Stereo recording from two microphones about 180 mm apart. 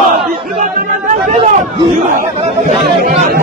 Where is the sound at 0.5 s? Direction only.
45° right (ahead or behind).